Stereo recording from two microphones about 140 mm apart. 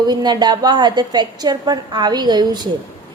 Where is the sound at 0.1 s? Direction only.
30° right (ahead or behind).